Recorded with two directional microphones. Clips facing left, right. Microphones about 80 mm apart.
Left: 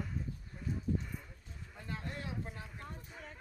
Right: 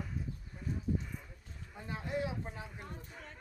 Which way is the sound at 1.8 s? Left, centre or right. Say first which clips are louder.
Right 6 dB; centre.